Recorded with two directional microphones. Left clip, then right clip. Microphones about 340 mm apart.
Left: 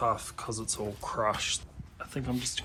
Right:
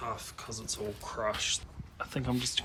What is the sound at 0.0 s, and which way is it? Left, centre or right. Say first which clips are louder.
Speech: left 9 dB; centre.